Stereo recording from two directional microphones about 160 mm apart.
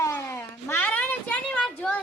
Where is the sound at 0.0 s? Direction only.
15° left (ahead or behind).